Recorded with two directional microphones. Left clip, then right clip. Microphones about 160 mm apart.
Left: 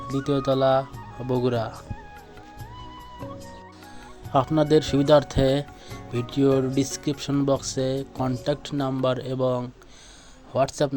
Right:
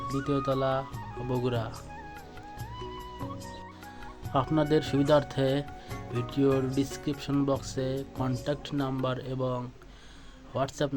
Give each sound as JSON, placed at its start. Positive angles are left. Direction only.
{"t": 0.3, "sound": "speech", "side_deg": 40}
{"t": 4.3, "sound": "speech", "side_deg": 35}
{"t": 5.9, "sound": "music", "side_deg": 0}
{"t": 6.3, "sound": "speech", "side_deg": 40}